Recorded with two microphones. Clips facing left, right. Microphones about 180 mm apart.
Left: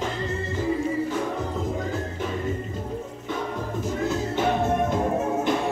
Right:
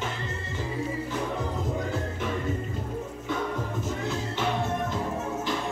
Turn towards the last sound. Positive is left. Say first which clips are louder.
# left 6 dB
turn(degrees=50)  # may be behind; listen again after turning